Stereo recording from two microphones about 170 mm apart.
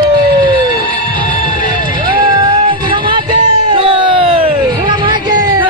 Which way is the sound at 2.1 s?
30° right (ahead or behind).